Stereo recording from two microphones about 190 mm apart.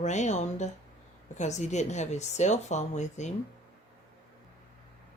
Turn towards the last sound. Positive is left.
turn(degrees=35)  # may be behind; listen again after turning